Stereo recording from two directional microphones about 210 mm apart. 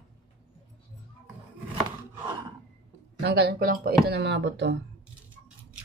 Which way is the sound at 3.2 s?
50° right (ahead or behind).